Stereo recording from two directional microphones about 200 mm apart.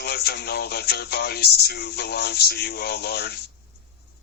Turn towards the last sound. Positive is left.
turn(degrees=55)  # may be behind; listen again after turning